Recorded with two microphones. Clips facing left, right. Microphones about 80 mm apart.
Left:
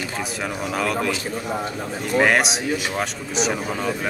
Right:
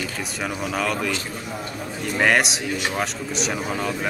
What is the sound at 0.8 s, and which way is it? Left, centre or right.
Speech, centre.